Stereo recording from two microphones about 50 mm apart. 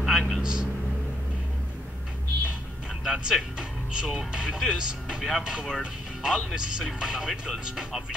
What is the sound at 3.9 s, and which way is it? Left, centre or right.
Speech, centre.